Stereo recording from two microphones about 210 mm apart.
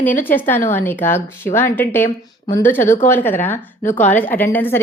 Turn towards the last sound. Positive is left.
turn(degrees=10)  # may be behind; listen again after turning